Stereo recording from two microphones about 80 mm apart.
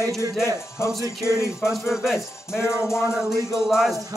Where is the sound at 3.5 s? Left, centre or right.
Centre.